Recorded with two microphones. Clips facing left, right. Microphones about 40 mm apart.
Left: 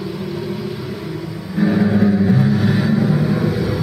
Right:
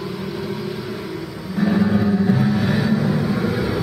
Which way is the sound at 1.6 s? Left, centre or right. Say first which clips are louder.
Left 3 dB; centre.